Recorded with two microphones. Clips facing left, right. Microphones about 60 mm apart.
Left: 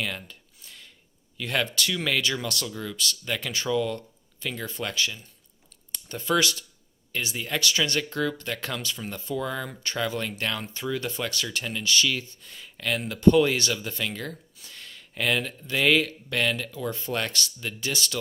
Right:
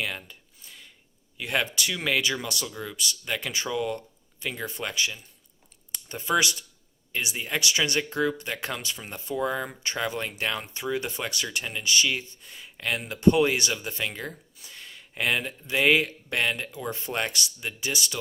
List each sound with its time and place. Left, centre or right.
0.0 s a sound: centre
1.4 s speech: centre
14.6 s speech: centre